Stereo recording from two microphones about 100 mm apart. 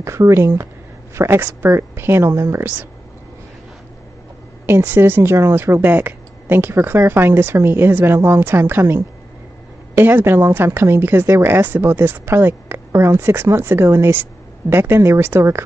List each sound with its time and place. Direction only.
0.0 s speech: 30° right (ahead or behind)
4.6 s speech: 20° right (ahead or behind)